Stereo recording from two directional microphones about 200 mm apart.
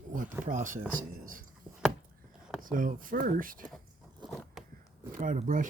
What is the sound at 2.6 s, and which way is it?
Speech, 45° right (ahead or behind).